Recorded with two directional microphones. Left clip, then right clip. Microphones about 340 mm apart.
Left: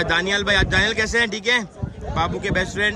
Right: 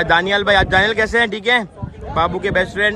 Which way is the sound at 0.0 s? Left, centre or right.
Centre.